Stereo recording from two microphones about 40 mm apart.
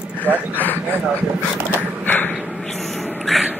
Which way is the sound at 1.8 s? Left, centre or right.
Left.